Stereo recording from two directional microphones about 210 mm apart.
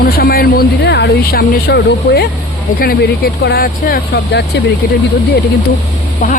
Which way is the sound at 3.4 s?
45° left (ahead or behind).